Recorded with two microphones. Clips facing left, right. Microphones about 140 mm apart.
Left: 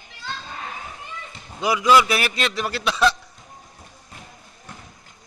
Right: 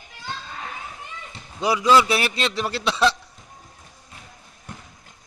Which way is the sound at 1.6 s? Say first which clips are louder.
Even; 30° right (ahead or behind).